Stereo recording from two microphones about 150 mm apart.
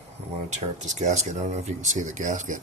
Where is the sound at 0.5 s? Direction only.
50° right (ahead or behind).